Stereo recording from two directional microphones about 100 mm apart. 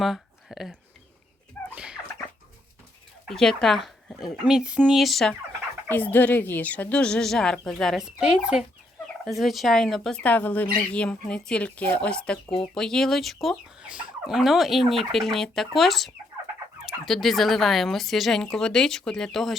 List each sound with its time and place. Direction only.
0.0 s a sound: centre (ahead or behind)
1.7 s dog: 10° right (ahead or behind)
3.2 s speech: 5° left (ahead or behind)
5.9 s speech: 20° left (ahead or behind); by 10.2 s 5° left (ahead or behind)
10.2 s speech: 15° left (ahead or behind)
13.8 s speech: 10° right (ahead or behind)